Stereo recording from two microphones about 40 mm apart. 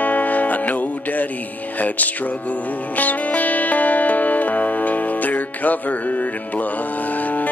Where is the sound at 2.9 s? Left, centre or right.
Left.